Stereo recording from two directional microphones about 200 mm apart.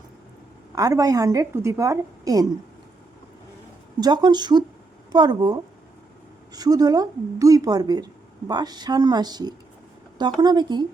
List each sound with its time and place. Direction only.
0.8 s a woman's voice: 15° right (ahead or behind)
4.0 s speech: 20° right (ahead or behind)